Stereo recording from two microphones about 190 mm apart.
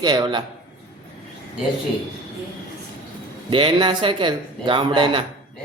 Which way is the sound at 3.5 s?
25° right (ahead or behind).